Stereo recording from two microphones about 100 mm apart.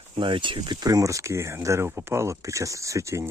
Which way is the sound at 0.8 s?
35° right (ahead or behind).